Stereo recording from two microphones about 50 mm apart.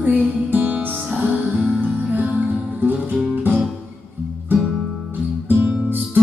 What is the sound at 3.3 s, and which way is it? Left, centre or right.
Music, right.